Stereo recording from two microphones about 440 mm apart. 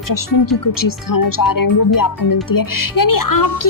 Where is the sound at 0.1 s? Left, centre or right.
Left.